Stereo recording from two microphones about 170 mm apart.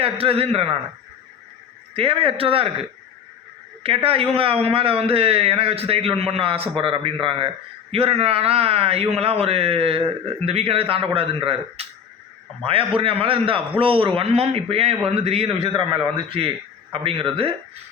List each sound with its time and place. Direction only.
0.0 s a man's voice: 35° right (ahead or behind)
2.0 s a man's voice: 30° right (ahead or behind)
3.8 s a man's voice: 35° right (ahead or behind)
13.0 s a man's voice: 35° right (ahead or behind)